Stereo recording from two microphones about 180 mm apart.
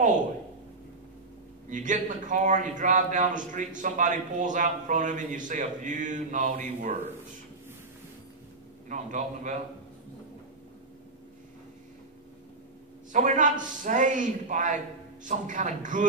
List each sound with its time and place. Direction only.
1.7 s a man's voice: 45° right (ahead or behind)
8.8 s a man's voice: 45° right (ahead or behind)
13.1 s a man's voice: 45° right (ahead or behind)